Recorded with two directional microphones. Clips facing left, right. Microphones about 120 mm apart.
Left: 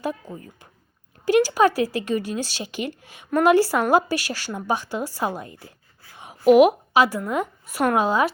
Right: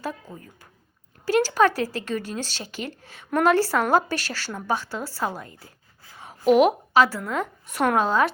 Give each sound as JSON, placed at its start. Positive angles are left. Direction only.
{"t": 0.0, "sound": "a woman's voice", "side_deg": 15}